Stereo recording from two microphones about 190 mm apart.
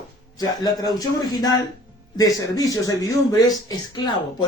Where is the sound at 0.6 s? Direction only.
20° left (ahead or behind).